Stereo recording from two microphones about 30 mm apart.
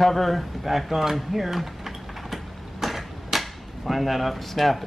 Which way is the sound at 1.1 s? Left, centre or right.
Centre.